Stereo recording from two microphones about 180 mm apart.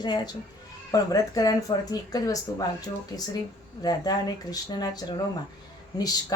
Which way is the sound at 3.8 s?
20° left (ahead or behind).